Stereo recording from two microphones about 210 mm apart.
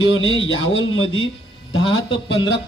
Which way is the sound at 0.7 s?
70° left (ahead or behind).